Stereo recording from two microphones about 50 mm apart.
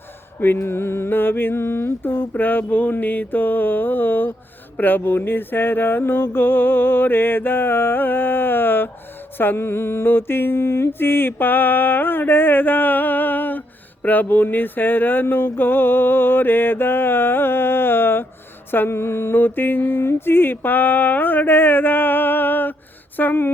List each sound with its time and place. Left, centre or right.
0.3 s mantra: left